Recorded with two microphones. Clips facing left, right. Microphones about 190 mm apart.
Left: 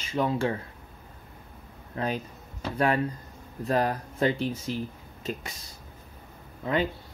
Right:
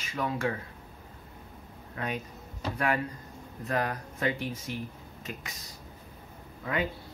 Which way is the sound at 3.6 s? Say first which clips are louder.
Left 5 dB; 30° left (ahead or behind).